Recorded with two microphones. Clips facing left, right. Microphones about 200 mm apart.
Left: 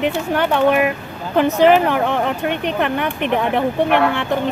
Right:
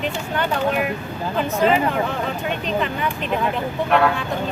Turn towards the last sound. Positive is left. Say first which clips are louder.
# left 3 dB
turn(degrees=70)  # may be behind; listen again after turning